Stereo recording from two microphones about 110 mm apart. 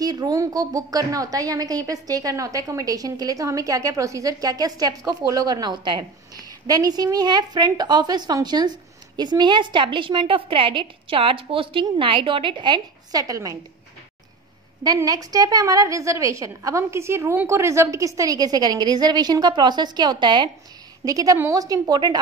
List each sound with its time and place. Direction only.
0.0 s a woman's voice: 35° right (ahead or behind)
14.8 s a woman's voice: 35° right (ahead or behind)
21.0 s a woman's voice: 30° right (ahead or behind)